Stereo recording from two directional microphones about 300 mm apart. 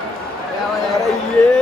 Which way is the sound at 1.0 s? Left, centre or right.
Centre.